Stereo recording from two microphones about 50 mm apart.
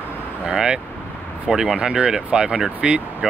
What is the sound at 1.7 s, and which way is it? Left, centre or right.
Speech, centre.